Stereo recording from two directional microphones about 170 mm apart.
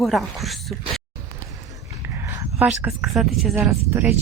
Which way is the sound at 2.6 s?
10° right (ahead or behind).